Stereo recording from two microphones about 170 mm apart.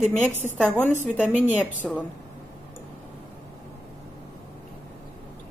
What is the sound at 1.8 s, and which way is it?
Speech, centre (ahead or behind).